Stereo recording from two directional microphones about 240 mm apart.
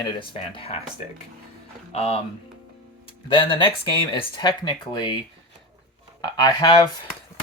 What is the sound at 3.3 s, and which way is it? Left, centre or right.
Speech, centre.